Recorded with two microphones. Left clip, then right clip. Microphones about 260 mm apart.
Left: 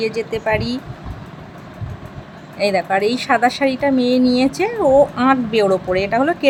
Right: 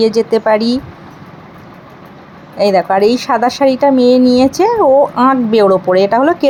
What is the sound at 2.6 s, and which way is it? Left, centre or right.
Speech, centre.